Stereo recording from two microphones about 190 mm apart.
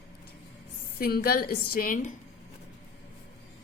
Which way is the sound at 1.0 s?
50° left (ahead or behind).